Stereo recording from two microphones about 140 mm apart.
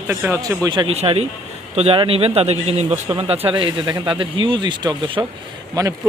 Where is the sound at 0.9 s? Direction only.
45° right (ahead or behind).